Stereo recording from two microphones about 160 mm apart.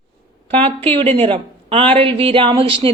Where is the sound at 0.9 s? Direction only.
35° right (ahead or behind).